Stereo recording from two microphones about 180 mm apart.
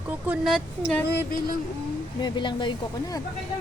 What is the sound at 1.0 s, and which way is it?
Speech, 65° left (ahead or behind).